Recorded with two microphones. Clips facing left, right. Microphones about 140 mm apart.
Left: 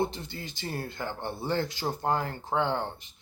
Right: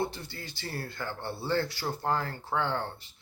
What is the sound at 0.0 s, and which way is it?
Speech, 20° left (ahead or behind).